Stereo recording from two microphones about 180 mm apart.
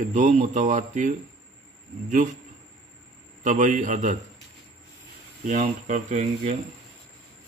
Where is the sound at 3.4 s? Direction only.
45° right (ahead or behind).